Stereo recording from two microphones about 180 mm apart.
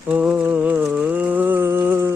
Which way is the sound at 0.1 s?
5° right (ahead or behind).